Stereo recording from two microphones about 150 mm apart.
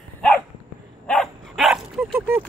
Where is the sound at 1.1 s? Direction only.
Centre (ahead or behind).